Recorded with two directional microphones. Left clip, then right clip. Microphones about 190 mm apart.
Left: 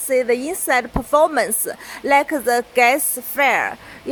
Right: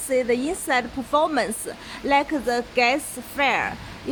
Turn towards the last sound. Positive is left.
turn(degrees=35)  # may be behind; listen again after turning